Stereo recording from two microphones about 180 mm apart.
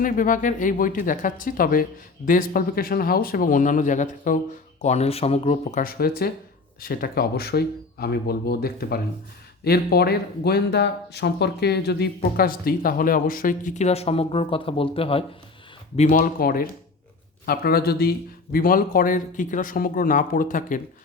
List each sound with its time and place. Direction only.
0.0 s speech: 50° left (ahead or behind)
5.8 s speech: 55° left (ahead or behind); by 15.2 s 30° left (ahead or behind)
16.0 s speech: 50° left (ahead or behind)